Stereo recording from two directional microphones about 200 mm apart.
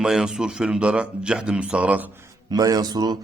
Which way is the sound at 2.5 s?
20° right (ahead or behind).